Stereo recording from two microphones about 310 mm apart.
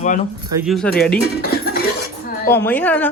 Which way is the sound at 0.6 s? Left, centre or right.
Centre.